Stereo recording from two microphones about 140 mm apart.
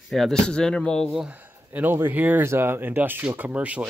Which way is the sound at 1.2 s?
10° right (ahead or behind).